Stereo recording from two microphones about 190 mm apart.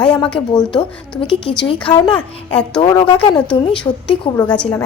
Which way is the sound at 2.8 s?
25° left (ahead or behind).